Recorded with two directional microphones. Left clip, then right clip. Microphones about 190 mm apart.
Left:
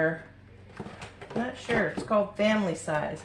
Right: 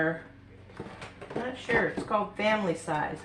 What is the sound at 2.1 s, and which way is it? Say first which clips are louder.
Speech: left 3 dB; 20° right (ahead or behind).